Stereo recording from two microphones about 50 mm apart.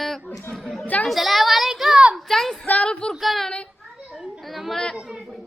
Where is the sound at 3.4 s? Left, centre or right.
Left.